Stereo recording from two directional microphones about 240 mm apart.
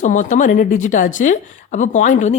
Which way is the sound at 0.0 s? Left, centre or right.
Left.